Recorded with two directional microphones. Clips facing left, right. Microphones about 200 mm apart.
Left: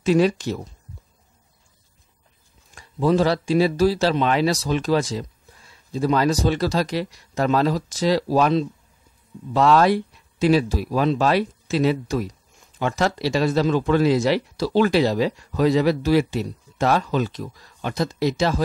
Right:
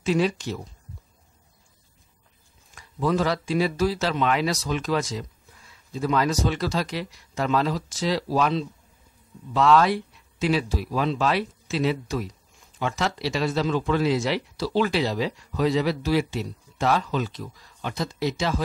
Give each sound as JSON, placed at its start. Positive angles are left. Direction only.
{"t": 0.0, "sound": "speech", "side_deg": 40}
{"t": 2.7, "sound": "speech", "side_deg": 30}